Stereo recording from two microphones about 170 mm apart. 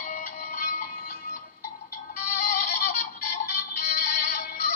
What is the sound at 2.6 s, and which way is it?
Synthetic singing, 60° left (ahead or behind).